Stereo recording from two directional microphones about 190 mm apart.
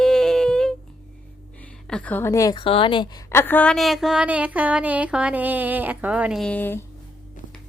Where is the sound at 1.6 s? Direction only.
5° left (ahead or behind); by 3.2 s 25° left (ahead or behind).